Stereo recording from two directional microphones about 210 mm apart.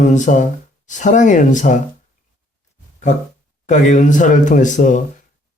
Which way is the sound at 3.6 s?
35° left (ahead or behind).